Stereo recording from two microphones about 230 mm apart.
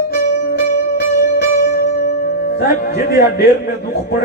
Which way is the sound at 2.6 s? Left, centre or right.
Left.